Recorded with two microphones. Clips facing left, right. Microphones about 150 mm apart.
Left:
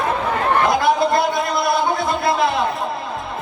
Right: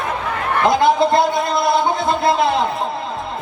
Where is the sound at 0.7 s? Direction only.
25° right (ahead or behind).